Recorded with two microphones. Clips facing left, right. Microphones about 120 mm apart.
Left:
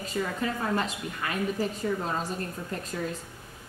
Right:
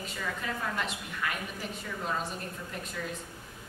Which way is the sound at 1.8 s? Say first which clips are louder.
Left 11 dB; 40° left (ahead or behind).